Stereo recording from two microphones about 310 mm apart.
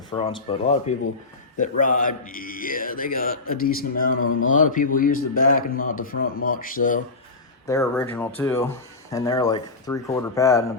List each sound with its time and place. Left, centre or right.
0.1 s speech: centre
4.2 s speech: left
4.5 s speech: left
7.7 s speech: centre